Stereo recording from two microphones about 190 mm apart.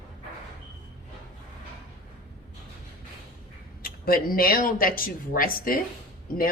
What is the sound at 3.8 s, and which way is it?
A woman's voice, 50° left (ahead or behind).